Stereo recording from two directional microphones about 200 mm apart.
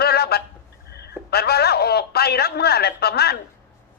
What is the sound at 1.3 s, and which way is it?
A man's voice, 50° left (ahead or behind).